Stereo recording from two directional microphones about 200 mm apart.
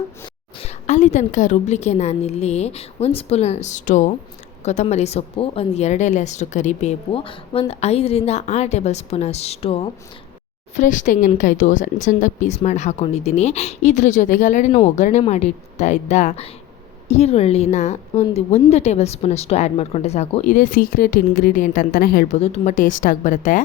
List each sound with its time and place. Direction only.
0.6 s speech: 35° left (ahead or behind)
10.8 s speech: 40° left (ahead or behind)
22.4 s speech: 35° left (ahead or behind)